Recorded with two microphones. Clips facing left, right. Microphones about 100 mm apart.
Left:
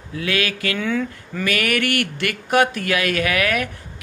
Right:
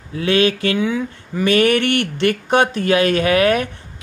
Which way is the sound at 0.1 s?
30° right (ahead or behind).